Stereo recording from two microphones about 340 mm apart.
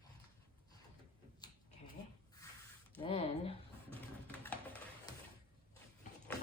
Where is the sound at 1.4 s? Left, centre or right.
Centre.